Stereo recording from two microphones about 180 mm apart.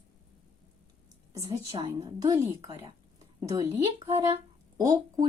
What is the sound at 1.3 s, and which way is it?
A woman's voice, 15° right (ahead or behind).